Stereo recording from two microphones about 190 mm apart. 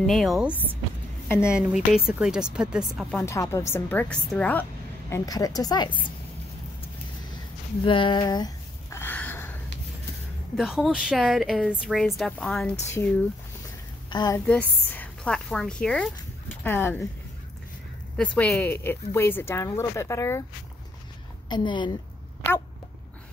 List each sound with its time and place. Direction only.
0.0 s speech: centre (ahead or behind)
3.2 s speech: 15° left (ahead or behind)
5.1 s a woman's voice: 20° left (ahead or behind)
7.8 s a sound: 25° left (ahead or behind); by 9.6 s 10° left (ahead or behind)
10.5 s speech: centre (ahead or behind)
14.1 s a woman's voice: 20° left (ahead or behind)
14.4 s a woman's voice: 10° left (ahead or behind)
18.1 s speech: 5° left (ahead or behind)
21.5 s a woman's voice: 25° left (ahead or behind)